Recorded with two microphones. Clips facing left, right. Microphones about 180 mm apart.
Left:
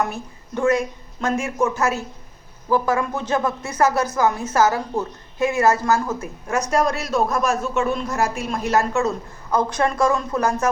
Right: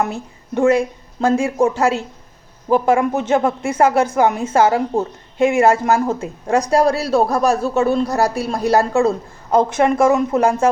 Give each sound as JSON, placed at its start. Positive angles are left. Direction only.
{"t": 0.0, "sound": "speech", "side_deg": -25}